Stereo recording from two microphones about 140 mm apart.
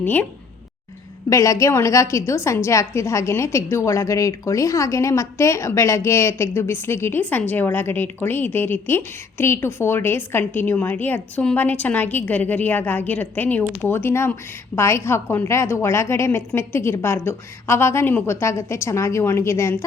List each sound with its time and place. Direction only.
0.0 s a woman's voice: 15° left (ahead or behind)
1.3 s a woman's voice: 20° left (ahead or behind)